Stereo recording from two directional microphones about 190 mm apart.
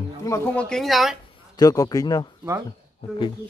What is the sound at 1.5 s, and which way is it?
Speech, 20° left (ahead or behind).